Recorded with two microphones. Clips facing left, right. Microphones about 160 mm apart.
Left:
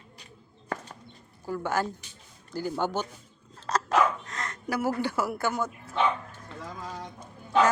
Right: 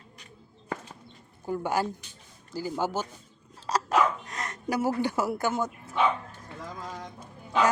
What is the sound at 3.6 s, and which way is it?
Dog, 10° right (ahead or behind).